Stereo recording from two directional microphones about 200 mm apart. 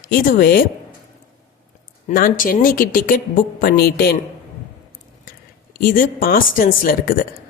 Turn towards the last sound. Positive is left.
turn(degrees=45)  # may be behind; listen again after turning